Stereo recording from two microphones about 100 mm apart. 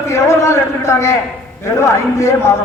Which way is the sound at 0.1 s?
30° left (ahead or behind).